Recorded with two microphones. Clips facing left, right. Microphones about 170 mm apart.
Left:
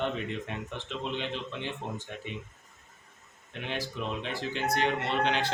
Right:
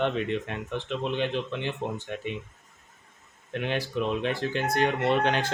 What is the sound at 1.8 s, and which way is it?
Speech, 65° right (ahead or behind).